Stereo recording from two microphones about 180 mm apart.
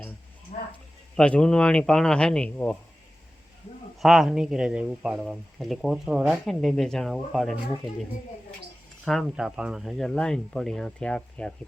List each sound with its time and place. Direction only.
0.5 s a sound: 35° left (ahead or behind)
1.1 s speech: 5° left (ahead or behind)
4.0 s speech: centre (ahead or behind)
9.0 s speech: centre (ahead or behind)